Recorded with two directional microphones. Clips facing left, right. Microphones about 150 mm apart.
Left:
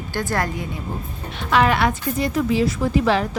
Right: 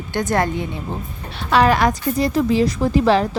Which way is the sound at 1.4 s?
35° right (ahead or behind).